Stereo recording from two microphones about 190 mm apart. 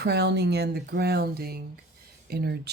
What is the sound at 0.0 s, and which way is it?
Speech, 60° right (ahead or behind).